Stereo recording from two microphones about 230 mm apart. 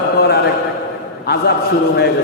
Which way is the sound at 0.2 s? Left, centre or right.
Left.